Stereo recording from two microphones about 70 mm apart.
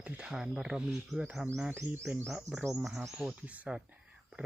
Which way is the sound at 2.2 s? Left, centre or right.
Centre.